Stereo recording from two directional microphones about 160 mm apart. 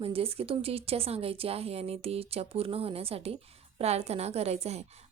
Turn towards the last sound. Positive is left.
turn(degrees=-40)  # may be behind; listen again after turning